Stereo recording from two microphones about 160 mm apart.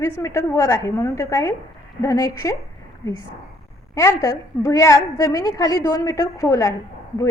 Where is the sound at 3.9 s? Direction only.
20° left (ahead or behind).